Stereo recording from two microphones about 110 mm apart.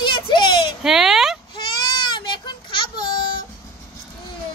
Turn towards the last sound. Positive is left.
turn(degrees=45)  # may be behind; listen again after turning